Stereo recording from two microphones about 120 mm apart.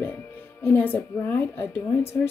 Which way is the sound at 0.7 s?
15° left (ahead or behind).